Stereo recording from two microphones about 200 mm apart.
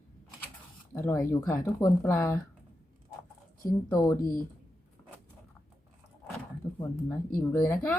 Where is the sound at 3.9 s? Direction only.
15° left (ahead or behind).